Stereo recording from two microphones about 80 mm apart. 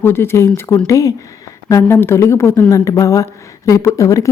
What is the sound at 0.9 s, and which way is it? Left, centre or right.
A woman's voice, left.